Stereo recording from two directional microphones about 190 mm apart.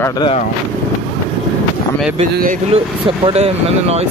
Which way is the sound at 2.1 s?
35° right (ahead or behind).